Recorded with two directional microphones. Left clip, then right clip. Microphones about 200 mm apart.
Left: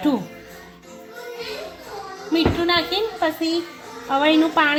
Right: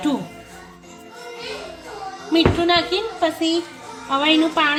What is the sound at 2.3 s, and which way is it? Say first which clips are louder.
Speech: right 3 dB; 30° left (ahead or behind).